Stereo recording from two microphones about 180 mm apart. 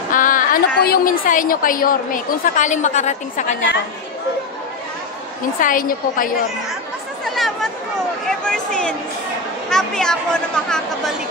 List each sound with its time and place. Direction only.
0.1 s a woman's voice: 50° left (ahead or behind)
5.6 s a woman's voice: 50° left (ahead or behind)
7.2 s chatter: centre (ahead or behind)
8.3 s speech: 5° left (ahead or behind)